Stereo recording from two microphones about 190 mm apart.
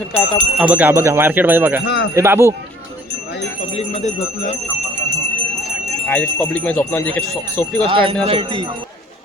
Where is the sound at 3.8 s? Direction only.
40° left (ahead or behind).